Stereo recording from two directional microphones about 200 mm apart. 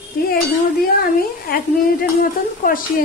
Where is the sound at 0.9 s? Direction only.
50° left (ahead or behind).